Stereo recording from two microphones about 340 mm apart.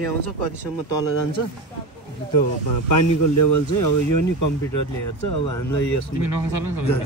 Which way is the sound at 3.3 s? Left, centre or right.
Left.